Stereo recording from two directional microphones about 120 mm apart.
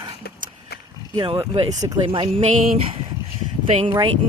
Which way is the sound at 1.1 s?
40° right (ahead or behind).